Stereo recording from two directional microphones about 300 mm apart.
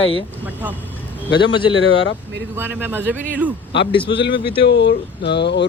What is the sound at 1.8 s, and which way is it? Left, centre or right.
Speech, left.